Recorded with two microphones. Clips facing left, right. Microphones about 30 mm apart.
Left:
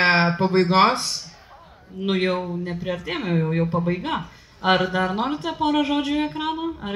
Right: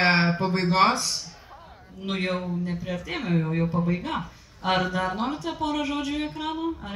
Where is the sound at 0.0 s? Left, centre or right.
Left.